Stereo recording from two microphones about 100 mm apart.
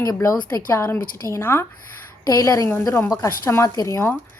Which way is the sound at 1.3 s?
25° left (ahead or behind).